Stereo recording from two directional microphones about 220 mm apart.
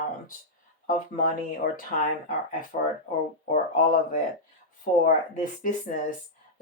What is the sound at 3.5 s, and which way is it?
Speech, 35° left (ahead or behind).